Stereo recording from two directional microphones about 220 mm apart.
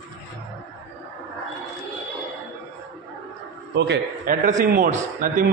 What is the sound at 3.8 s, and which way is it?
Speech, 50° right (ahead or behind).